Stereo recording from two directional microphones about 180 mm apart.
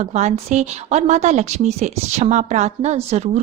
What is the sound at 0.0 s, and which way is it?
A woman's voice, 40° right (ahead or behind).